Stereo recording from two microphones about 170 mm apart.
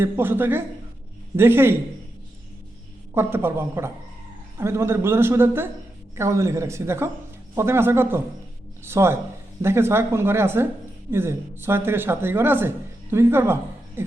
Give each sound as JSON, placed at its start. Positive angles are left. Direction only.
{"t": 0.0, "sound": "a man's voice", "side_deg": -10}
{"t": 3.2, "sound": "a man's voice", "side_deg": -15}